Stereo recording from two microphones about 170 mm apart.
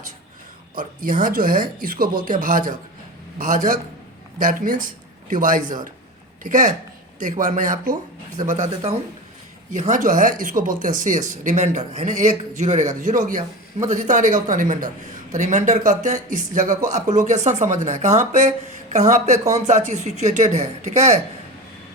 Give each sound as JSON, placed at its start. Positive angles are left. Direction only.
{"t": 0.8, "sound": "a man's voice", "side_deg": -55}